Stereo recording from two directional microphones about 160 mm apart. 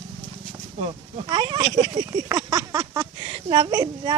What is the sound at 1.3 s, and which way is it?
Speech, 25° right (ahead or behind).